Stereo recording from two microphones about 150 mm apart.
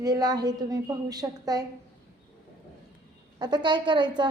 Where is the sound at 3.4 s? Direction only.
30° right (ahead or behind).